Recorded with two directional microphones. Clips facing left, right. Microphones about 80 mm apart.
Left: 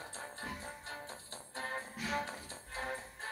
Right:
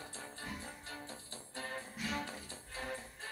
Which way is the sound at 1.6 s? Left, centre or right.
Left.